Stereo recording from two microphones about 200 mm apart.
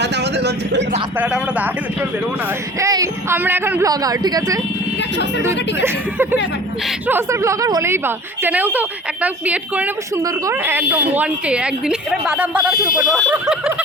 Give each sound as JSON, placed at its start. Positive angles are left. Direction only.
{"t": 0.0, "sound": "vehicle", "side_deg": -55}
{"t": 1.2, "sound": "a woman's voice", "side_deg": -5}